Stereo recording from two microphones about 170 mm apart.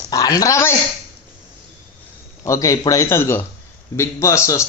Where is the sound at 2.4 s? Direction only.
20° left (ahead or behind).